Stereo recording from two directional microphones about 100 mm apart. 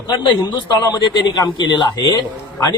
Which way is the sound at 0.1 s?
50° left (ahead or behind).